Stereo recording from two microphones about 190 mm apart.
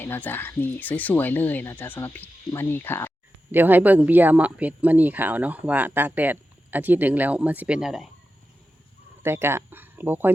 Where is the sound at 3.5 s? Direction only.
10° right (ahead or behind).